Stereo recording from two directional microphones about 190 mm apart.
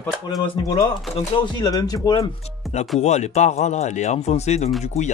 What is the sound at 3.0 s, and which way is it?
Speech, 35° left (ahead or behind).